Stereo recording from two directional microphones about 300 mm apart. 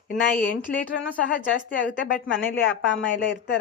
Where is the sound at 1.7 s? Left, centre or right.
Left.